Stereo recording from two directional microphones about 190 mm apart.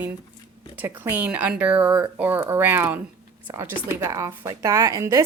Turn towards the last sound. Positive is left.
turn(degrees=-15)  # may be behind; listen again after turning